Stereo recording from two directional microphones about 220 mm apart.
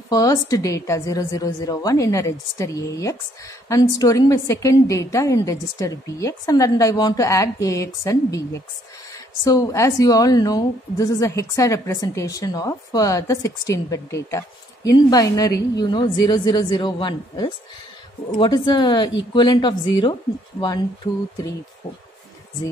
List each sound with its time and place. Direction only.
0.1 s a woman's voice: 15° left (ahead or behind)